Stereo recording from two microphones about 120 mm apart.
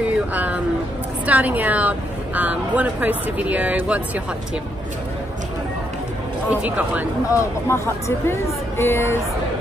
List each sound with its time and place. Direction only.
0.0 s a sound: 15° right (ahead or behind)
1.2 s speech: 15° right (ahead or behind)
6.5 s speech: 10° right (ahead or behind)
7.2 s speech: 25° left (ahead or behind)